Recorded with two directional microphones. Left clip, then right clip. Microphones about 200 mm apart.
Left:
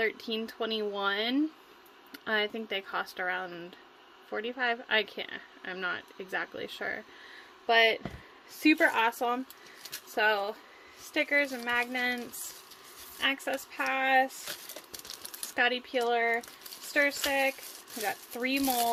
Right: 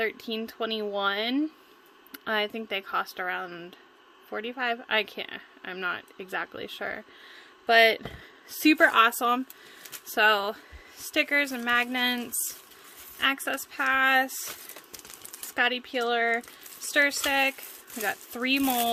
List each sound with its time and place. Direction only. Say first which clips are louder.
0.0 s speech: right 1 dB; 15° right (ahead or behind)
8.6 s speech: right 5 dB; 35° right (ahead or behind)
15.5 s speech: right 2 dB; 15° right (ahead or behind)